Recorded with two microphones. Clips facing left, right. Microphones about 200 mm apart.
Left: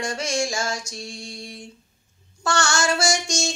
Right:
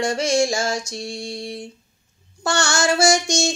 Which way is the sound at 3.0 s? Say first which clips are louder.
Right 6 dB; 30° right (ahead or behind).